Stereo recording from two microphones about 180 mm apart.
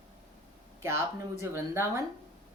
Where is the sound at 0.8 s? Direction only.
15° right (ahead or behind).